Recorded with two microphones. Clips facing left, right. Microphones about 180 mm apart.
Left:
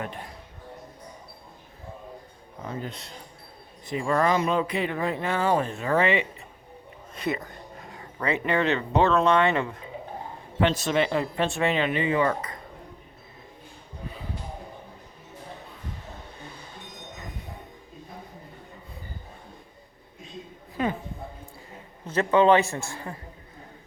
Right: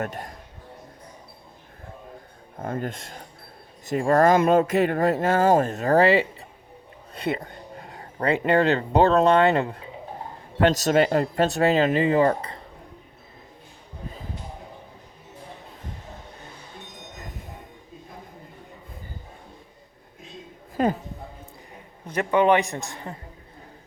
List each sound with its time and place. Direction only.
0.0 s speech: 45° right (ahead or behind)
2.6 s speech: 50° right (ahead or behind); by 12.5 s 35° right (ahead or behind)
20.8 s a sound: 40° right (ahead or behind)
22.0 s a man's voice: 15° right (ahead or behind)